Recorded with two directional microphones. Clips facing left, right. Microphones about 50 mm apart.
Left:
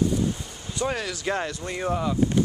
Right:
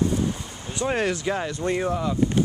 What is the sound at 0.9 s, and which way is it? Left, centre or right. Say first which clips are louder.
Speech: right 7 dB; right.